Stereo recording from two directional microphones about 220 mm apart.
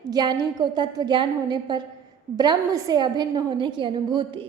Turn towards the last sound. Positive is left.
turn(degrees=-20)  # may be behind; listen again after turning